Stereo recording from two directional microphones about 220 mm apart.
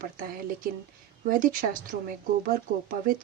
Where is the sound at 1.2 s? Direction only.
40° right (ahead or behind).